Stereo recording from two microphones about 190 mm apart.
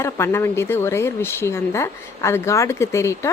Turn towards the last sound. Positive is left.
turn(degrees=15)  # may be behind; listen again after turning